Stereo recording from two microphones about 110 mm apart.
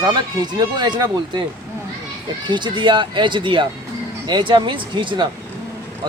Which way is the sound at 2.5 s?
45° right (ahead or behind).